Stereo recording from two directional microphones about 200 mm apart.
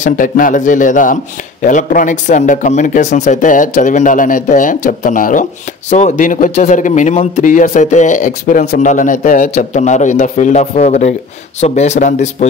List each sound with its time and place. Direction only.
0.0 s speech: 40° left (ahead or behind)